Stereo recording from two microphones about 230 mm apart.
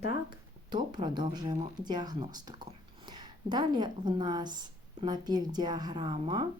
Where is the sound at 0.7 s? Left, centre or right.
Centre.